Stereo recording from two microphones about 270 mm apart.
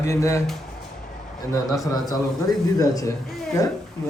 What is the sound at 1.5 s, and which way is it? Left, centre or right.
A man's voice, centre.